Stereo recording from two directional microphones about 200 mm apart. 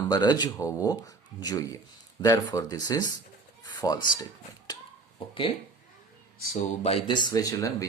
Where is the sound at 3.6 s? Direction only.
20° left (ahead or behind).